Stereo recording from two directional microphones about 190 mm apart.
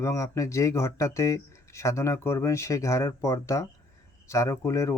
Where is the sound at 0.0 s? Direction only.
15° left (ahead or behind).